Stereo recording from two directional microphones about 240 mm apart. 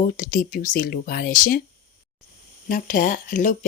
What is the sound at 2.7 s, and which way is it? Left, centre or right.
Speech, left.